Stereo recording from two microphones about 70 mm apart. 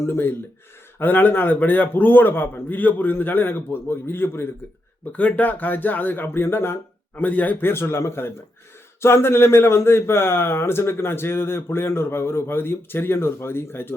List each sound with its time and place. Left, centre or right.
0.0 s a man's voice: left
5.1 s a man's voice: left
7.2 s a man's voice: left
7.7 s speech: left